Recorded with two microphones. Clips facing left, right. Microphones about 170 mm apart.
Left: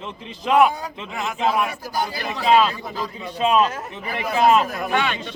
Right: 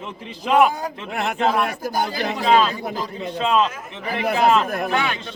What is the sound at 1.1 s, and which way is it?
Speech, 65° right (ahead or behind).